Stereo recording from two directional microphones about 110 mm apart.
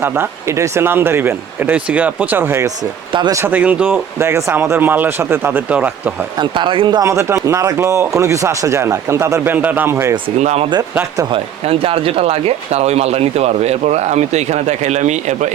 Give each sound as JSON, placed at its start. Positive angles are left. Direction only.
{"t": 0.0, "sound": "speech", "side_deg": -20}
{"t": 3.1, "sound": "speech", "side_deg": -45}
{"t": 3.3, "sound": "speech", "side_deg": -15}
{"t": 6.4, "sound": "speech", "side_deg": -45}
{"t": 7.0, "sound": "speech", "side_deg": -25}
{"t": 10.2, "sound": "speech", "side_deg": -70}
{"t": 11.3, "sound": "speech", "side_deg": -60}